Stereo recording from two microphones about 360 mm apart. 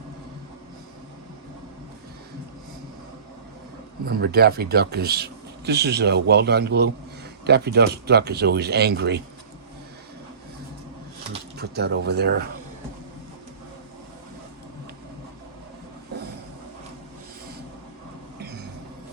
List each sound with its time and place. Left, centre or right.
4.0 s speech: right
11.3 s pigeon: right